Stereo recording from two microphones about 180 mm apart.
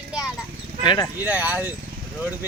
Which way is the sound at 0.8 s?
25° left (ahead or behind).